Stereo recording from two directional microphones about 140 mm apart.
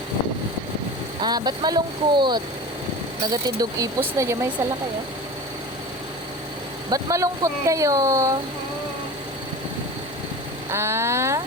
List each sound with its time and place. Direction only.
1.2 s speech: 30° right (ahead or behind)
6.9 s speech: 25° right (ahead or behind)
10.7 s speech: 20° right (ahead or behind)